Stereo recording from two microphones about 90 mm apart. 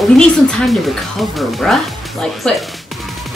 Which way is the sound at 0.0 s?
5° left (ahead or behind).